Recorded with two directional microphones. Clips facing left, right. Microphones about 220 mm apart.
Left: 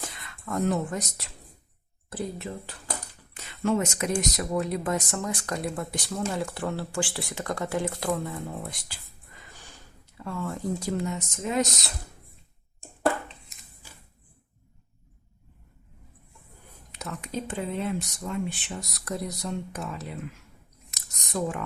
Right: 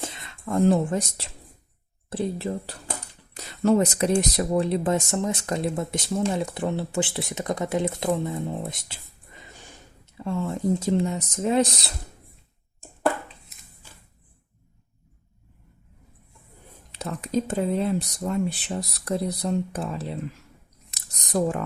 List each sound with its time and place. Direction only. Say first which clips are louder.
0.0 s speech: right 5 dB; 25° right (ahead or behind)
3.3 s speech: right 6 dB; 40° right (ahead or behind)
16.9 s speech: right 8 dB; 35° right (ahead or behind)
20.9 s scissors: right 6 dB; 35° right (ahead or behind)